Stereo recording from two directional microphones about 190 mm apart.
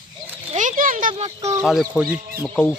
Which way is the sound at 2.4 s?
10° left (ahead or behind).